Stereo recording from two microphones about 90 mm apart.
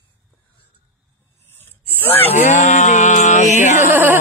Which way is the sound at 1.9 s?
20° left (ahead or behind).